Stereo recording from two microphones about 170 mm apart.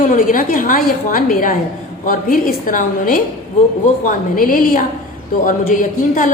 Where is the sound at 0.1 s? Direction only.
50° left (ahead or behind).